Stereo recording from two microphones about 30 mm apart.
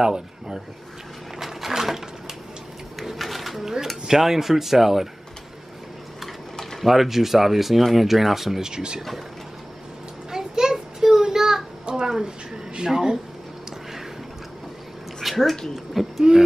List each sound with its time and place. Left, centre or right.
0.0 s speech: right
1.4 s a sound: centre
3.2 s speech: centre
6.8 s speech: centre
8.5 s speech: right
10.3 s a sound: centre
12.8 s speech: right
15.2 s cat: centre
15.7 s speech: centre